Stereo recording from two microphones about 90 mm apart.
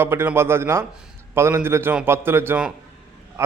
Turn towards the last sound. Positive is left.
turn(degrees=-30)  # may be behind; listen again after turning